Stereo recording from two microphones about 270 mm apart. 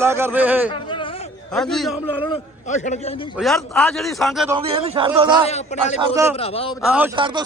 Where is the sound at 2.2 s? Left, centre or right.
Left.